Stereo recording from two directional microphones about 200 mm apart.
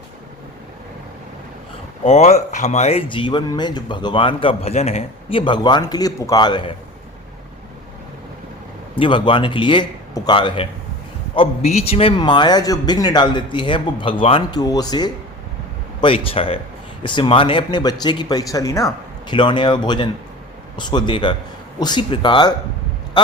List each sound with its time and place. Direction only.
2.0 s speech: 35° left (ahead or behind)
9.0 s speech: 25° left (ahead or behind)